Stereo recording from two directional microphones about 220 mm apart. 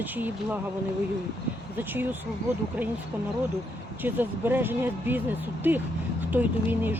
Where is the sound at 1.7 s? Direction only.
10° right (ahead or behind).